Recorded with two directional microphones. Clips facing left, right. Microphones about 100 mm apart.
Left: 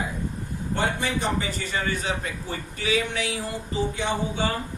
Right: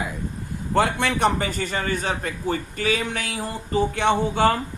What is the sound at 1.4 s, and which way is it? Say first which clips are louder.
A man's voice: right 3 dB; 50° right (ahead or behind).